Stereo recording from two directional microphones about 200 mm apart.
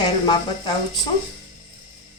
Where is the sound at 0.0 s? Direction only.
20° left (ahead or behind).